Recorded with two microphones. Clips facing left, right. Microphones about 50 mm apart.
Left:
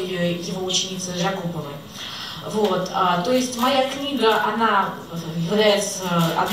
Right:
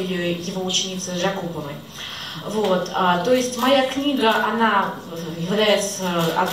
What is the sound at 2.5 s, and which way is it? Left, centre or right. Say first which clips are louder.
A woman's voice: even; right.